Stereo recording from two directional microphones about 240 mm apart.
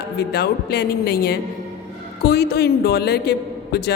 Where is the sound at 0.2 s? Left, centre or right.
Left.